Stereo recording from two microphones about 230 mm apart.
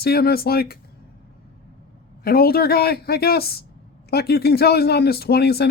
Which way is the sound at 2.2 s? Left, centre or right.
Left.